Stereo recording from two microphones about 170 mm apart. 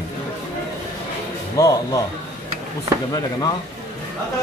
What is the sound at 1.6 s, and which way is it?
Speech, 20° left (ahead or behind).